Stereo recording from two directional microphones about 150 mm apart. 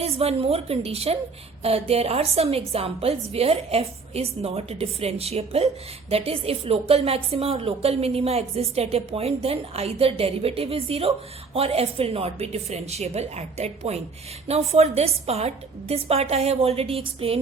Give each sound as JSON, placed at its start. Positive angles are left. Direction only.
{"t": 0.0, "sound": "a woman's voice", "side_deg": -40}